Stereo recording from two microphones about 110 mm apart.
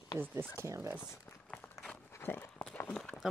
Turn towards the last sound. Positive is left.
turn(degrees=5)  # may be behind; listen again after turning